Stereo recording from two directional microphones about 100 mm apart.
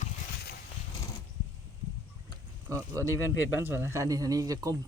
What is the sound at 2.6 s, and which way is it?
Speech, 30° right (ahead or behind).